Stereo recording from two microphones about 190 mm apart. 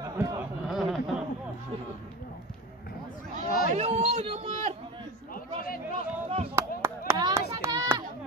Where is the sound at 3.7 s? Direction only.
35° right (ahead or behind).